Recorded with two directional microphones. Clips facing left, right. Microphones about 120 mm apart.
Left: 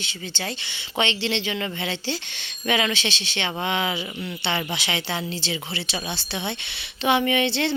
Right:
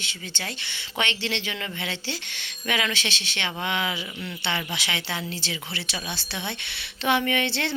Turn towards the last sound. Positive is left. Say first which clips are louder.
# left 4 dB
turn(degrees=20)  # may be behind; listen again after turning